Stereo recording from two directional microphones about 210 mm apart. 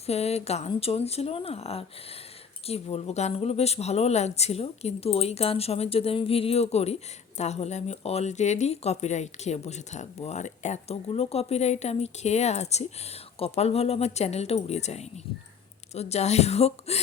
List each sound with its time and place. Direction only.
0.0 s a woman's voice: 30° left (ahead or behind)